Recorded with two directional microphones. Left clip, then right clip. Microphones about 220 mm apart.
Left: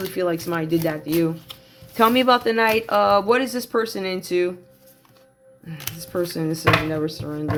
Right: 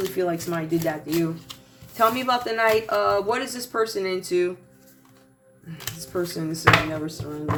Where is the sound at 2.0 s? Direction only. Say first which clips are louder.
Left 4 dB; 45° left (ahead or behind).